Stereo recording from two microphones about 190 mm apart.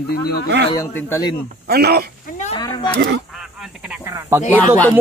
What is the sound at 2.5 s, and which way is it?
Speech, 25° left (ahead or behind).